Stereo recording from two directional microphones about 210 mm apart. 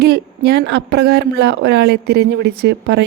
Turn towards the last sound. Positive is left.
turn(degrees=-50)  # may be behind; listen again after turning